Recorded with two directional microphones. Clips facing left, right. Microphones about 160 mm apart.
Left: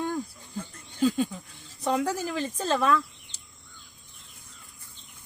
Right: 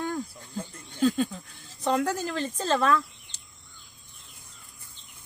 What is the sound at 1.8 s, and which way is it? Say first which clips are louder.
A woman's voice: right 1 dB; 10° left (ahead or behind).